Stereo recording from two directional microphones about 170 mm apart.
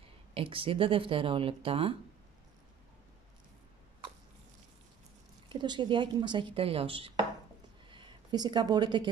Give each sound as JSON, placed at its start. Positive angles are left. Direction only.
{"t": 0.3, "sound": "speech", "side_deg": -30}
{"t": 5.5, "sound": "a woman's voice", "side_deg": -25}